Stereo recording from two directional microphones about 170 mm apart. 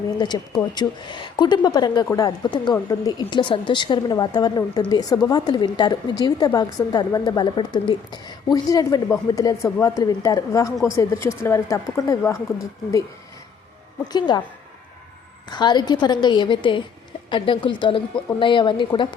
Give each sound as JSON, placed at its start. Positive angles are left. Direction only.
{"t": 0.2, "sound": "a woman's voice", "side_deg": 25}
{"t": 14.1, "sound": "a woman's voice", "side_deg": 25}
{"t": 15.4, "sound": "a woman's voice", "side_deg": 25}